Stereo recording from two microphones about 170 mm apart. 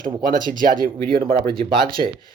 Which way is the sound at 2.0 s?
50° right (ahead or behind).